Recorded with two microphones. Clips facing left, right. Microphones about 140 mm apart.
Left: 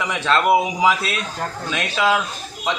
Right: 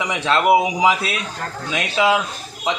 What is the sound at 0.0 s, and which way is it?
A man's voice, 15° right (ahead or behind).